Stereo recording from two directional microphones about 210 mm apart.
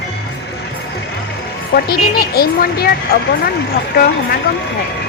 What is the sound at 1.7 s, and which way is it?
A woman's voice, 45° left (ahead or behind).